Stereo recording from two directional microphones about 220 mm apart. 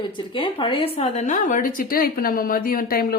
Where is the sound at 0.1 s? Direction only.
20° left (ahead or behind).